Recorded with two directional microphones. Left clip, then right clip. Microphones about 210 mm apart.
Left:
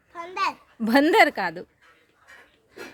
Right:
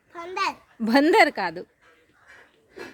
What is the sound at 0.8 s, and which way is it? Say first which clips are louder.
Speech: even; 10° left (ahead or behind).